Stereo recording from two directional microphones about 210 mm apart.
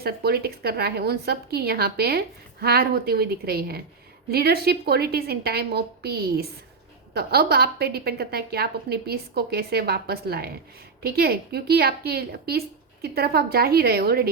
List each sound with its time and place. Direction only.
0.0 s a woman's voice: 50° right (ahead or behind)